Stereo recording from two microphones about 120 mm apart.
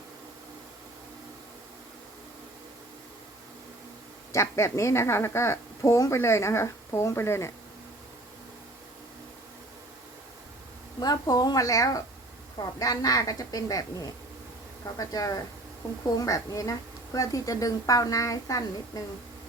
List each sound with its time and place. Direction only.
4.3 s a woman's voice: 25° left (ahead or behind)
11.0 s a woman's voice: 35° left (ahead or behind)